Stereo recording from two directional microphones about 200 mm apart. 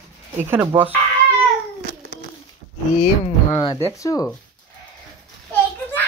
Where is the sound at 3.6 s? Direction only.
20° left (ahead or behind).